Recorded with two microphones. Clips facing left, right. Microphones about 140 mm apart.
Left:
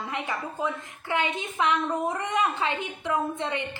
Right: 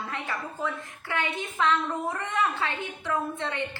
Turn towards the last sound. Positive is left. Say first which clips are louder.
# left 1 dB
turn(degrees=15)  # may be behind; listen again after turning